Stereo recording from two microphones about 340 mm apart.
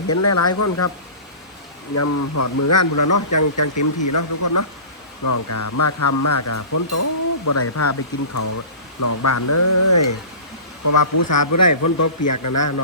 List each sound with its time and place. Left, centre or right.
0.1 s speech: left
2.0 s speech: left